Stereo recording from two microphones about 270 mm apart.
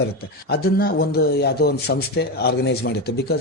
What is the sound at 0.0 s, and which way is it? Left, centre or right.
Speech, left.